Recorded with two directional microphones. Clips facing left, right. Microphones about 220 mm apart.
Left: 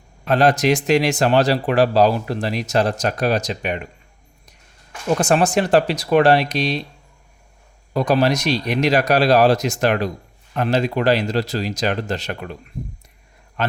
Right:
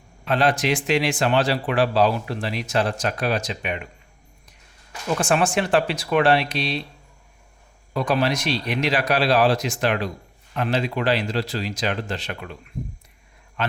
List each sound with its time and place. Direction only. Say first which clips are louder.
0.3 s speech: left 5 dB; 40° left (ahead or behind)
5.0 s speech: left 4 dB; 40° left (ahead or behind)
7.9 s speech: left 5 dB; 40° left (ahead or behind)